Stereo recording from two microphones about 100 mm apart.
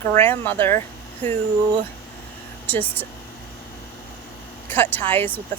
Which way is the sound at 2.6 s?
20° left (ahead or behind).